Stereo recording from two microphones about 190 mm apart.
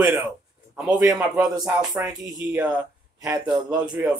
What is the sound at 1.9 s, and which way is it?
A man's voice, 20° right (ahead or behind).